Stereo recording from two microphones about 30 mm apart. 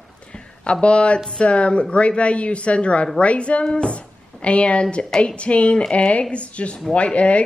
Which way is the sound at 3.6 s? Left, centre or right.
Left.